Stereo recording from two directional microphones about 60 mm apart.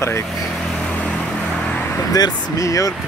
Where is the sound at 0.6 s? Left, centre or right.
Centre.